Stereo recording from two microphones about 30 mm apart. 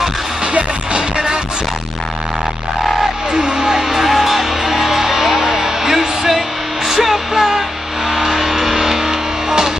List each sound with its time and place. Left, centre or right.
1.1 s music: right
3.3 s music: right
4.0 s music: centre